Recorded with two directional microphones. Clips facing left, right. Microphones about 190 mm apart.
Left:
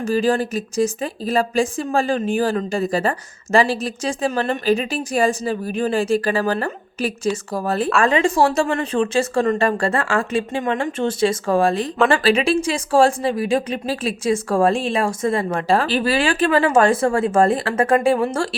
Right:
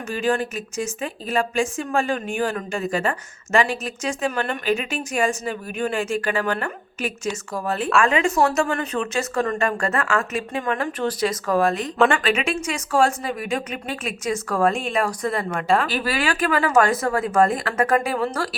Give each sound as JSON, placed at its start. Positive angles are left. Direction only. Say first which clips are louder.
{"t": 0.0, "sound": "a woman's voice", "louder": "left 4 dB", "side_deg": 35}